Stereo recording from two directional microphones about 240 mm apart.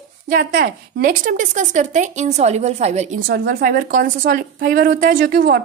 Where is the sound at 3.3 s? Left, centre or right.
Right.